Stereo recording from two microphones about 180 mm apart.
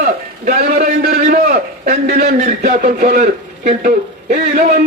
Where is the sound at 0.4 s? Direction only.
45° right (ahead or behind).